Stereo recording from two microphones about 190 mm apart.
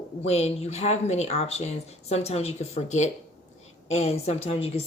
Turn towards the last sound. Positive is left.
turn(degrees=30)  # may be behind; listen again after turning